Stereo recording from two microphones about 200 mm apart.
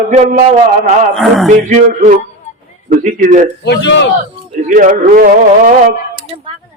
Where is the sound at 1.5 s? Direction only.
40° right (ahead or behind).